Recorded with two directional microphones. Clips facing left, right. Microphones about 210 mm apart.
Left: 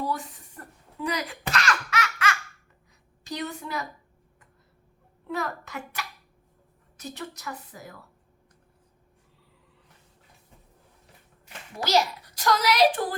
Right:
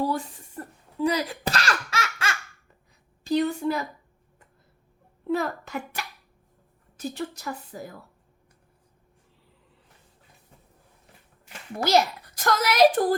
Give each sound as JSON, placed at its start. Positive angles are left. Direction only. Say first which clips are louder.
{"t": 0.1, "sound": "a sound", "louder": "right 3 dB", "side_deg": -30}
{"t": 3.2, "sound": "speech", "louder": "right 10 dB", "side_deg": -30}
{"t": 5.3, "sound": "a woman's voice", "louder": "right 5 dB", "side_deg": -30}
{"t": 11.9, "sound": "a woman's voice", "louder": "right 2 dB", "side_deg": -50}